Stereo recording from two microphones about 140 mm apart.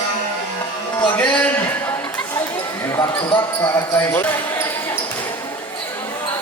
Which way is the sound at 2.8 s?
20° left (ahead or behind).